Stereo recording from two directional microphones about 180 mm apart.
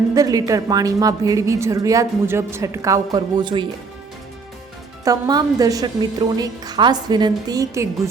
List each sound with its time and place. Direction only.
0.1 s a woman's voice: 20° right (ahead or behind)
5.0 s a woman's voice: 20° right (ahead or behind)